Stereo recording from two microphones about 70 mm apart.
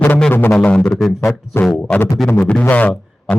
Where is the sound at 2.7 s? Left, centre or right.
Left.